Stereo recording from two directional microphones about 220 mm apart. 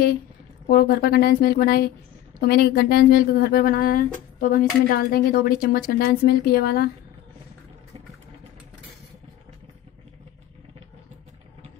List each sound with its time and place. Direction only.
0.7 s speech: 40° left (ahead or behind)